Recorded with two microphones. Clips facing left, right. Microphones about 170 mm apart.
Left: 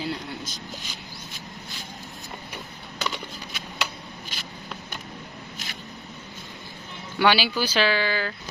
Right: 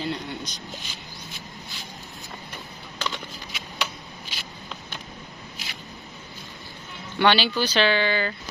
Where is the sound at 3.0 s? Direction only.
10° left (ahead or behind).